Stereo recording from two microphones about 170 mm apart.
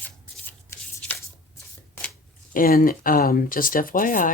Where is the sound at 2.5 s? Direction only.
55° left (ahead or behind).